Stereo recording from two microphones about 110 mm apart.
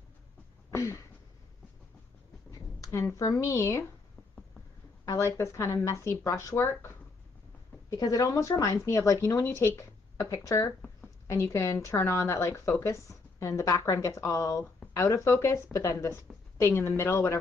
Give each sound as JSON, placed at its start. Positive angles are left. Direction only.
{"t": 0.7, "sound": "a sound", "side_deg": 25}
{"t": 2.8, "sound": "a woman's voice", "side_deg": 25}
{"t": 5.0, "sound": "a woman's voice", "side_deg": 30}
{"t": 7.9, "sound": "a woman's voice", "side_deg": 30}